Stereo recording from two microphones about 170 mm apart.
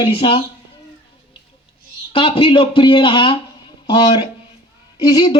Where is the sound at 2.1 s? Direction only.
30° left (ahead or behind).